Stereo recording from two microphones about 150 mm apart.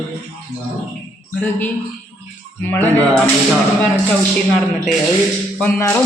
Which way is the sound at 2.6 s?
10° left (ahead or behind).